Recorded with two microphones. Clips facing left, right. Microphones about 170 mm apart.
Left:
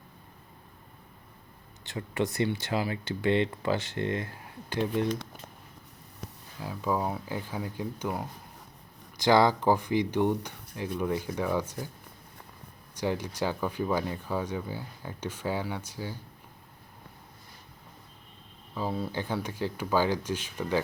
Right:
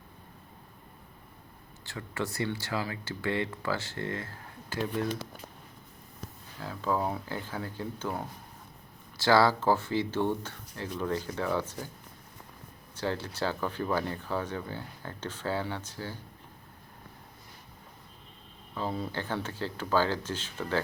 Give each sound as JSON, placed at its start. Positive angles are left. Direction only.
{"t": 1.8, "sound": "speech", "side_deg": 20}
{"t": 6.6, "sound": "speech", "side_deg": 15}
{"t": 13.0, "sound": "speech", "side_deg": 15}
{"t": 18.7, "sound": "speech", "side_deg": 5}